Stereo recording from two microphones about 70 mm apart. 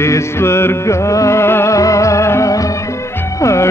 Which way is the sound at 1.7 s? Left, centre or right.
Left.